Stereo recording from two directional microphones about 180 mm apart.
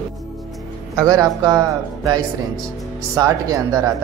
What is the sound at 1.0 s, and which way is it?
A man's voice, 20° right (ahead or behind).